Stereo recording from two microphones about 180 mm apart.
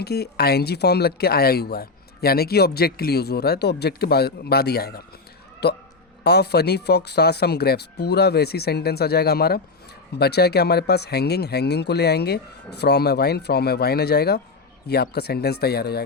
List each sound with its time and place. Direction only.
0.0 s a man's voice: 60° left (ahead or behind)